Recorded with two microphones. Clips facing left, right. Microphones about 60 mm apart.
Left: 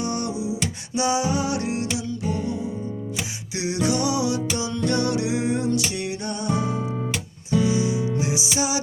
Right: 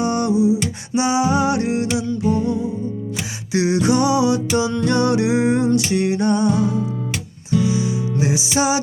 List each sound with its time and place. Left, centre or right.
0.0 s a sound: right
0.9 s music: right
3.5 s music: right
6.5 s music: left
8.2 s music: right